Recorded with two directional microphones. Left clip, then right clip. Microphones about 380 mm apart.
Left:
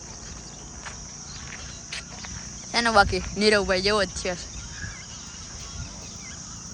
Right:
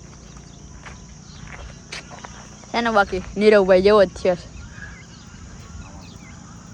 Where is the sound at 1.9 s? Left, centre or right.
Centre.